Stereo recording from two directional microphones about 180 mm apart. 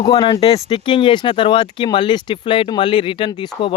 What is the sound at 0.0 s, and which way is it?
Speech, 20° left (ahead or behind).